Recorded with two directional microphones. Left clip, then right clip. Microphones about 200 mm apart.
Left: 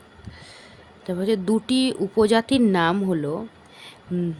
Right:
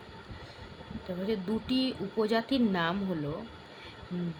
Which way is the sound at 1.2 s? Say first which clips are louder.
Left 11 dB; 50° left (ahead or behind).